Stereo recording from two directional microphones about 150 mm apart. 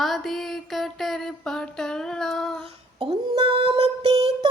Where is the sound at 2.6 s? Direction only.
35° right (ahead or behind).